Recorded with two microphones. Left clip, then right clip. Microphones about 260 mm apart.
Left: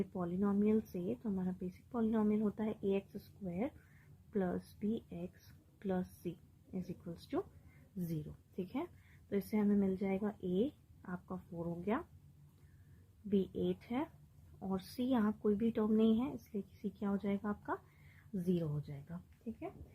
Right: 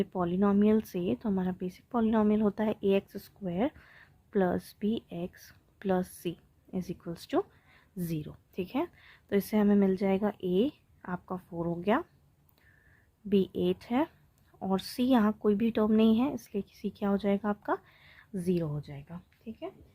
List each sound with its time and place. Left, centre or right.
0.0 s speech: right
13.3 s speech: right